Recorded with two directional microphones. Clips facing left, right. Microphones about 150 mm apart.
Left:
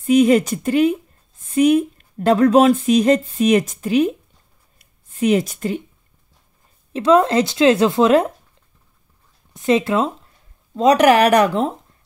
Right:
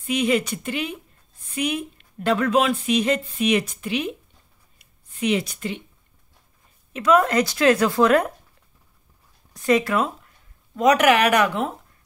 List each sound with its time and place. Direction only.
0.0 s speech: 45° left (ahead or behind)
4.7 s a sound: 45° left (ahead or behind)
6.9 s speech: 30° left (ahead or behind)
9.5 s speech: 25° left (ahead or behind)